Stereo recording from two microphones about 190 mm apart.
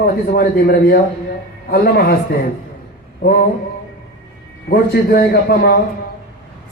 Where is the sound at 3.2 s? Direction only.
55° left (ahead or behind).